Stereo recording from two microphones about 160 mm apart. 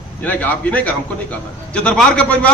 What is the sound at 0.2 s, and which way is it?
A man's voice, 10° left (ahead or behind).